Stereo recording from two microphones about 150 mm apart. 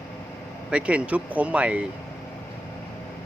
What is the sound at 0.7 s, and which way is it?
Speech, 10° right (ahead or behind).